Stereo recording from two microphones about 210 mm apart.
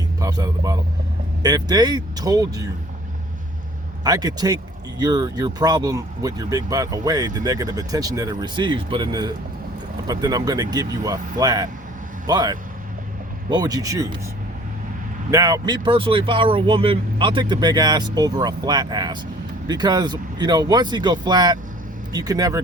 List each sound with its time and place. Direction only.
0.2 s speech: 15° right (ahead or behind)
4.0 s speech: 20° right (ahead or behind)
15.3 s speech: 15° right (ahead or behind)